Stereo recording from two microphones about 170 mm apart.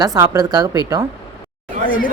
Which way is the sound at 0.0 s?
20° right (ahead or behind).